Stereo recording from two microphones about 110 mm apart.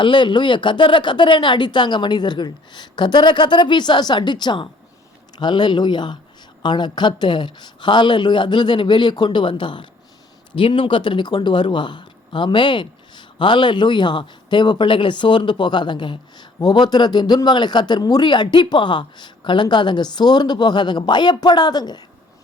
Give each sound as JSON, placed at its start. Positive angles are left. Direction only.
{"t": 0.0, "sound": "speech", "side_deg": 45}